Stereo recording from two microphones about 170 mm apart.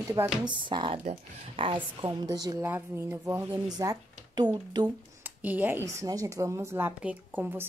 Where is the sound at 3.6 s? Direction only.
25° right (ahead or behind).